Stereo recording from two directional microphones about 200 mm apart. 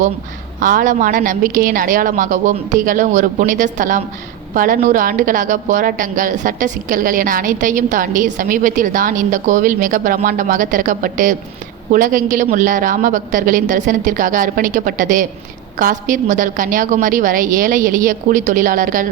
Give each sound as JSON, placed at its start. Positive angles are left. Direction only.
{"t": 0.6, "sound": "a woman's voice", "side_deg": -40}